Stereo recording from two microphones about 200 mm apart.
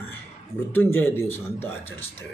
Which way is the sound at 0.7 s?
10° left (ahead or behind).